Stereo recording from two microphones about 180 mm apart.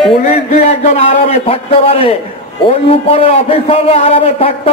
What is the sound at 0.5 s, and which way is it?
A man's voice, 35° left (ahead or behind).